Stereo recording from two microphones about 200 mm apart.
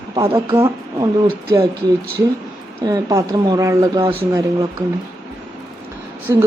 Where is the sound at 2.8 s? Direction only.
15° right (ahead or behind).